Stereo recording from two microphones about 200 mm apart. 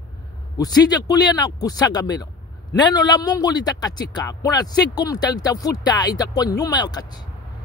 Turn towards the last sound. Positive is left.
turn(degrees=20)  # may be behind; listen again after turning